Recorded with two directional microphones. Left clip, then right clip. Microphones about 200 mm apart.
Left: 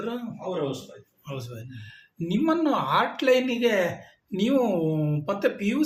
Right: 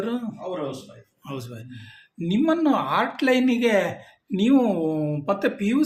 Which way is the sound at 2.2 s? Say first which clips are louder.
Right 3 dB; 35° right (ahead or behind).